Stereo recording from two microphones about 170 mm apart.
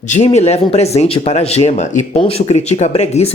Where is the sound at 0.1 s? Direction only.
40° left (ahead or behind).